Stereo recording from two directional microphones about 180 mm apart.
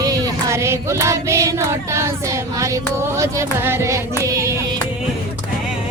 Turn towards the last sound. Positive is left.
turn(degrees=-15)  # may be behind; listen again after turning